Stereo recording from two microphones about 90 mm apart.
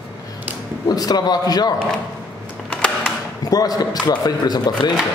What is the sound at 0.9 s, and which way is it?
Speech, 45° left (ahead or behind).